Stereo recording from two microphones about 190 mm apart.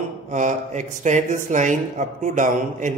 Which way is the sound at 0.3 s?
40° right (ahead or behind).